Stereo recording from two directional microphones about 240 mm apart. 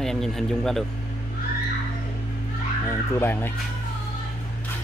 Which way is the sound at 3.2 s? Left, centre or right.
Centre.